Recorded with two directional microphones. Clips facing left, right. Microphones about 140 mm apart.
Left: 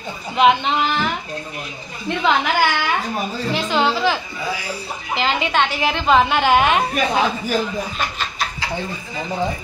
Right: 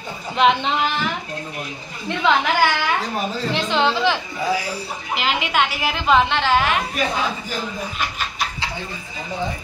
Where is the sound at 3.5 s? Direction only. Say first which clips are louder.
Left 1 dB; 5° left (ahead or behind).